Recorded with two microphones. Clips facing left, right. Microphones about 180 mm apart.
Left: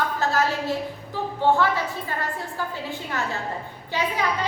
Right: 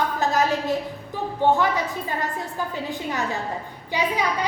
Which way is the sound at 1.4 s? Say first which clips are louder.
Right 1 dB; 15° right (ahead or behind).